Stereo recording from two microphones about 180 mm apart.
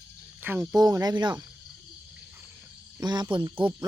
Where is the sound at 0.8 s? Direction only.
20° right (ahead or behind).